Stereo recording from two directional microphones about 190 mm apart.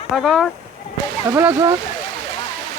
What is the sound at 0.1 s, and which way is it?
Speech, centre (ahead or behind).